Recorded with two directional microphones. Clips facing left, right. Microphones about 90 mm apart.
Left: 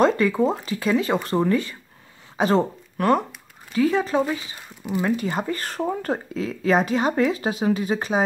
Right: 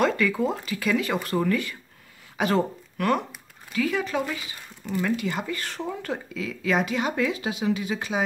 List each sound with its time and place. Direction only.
0.0 s speech: 30° left (ahead or behind)